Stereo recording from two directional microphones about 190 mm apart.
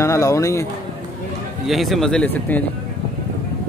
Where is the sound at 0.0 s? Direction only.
15° left (ahead or behind).